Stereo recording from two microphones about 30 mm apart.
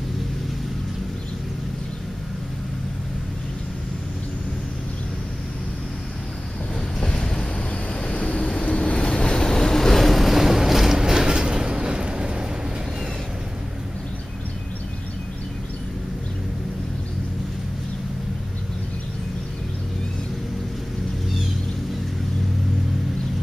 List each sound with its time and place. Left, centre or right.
7.1 s boat: left
8.1 s vehicle: left
9.3 s boat: left
9.9 s vehicle: centre
10.4 s vehicle: centre; by 12.4 s right